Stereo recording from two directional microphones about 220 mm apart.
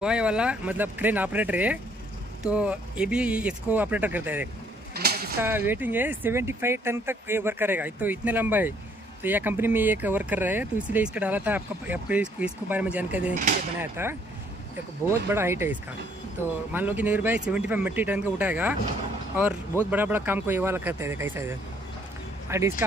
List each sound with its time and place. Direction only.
0.0 s speech: 5° right (ahead or behind)
4.9 s a sound: 45° right (ahead or behind)
5.4 s speech: 10° right (ahead or behind)
19.9 s speech: 10° right (ahead or behind)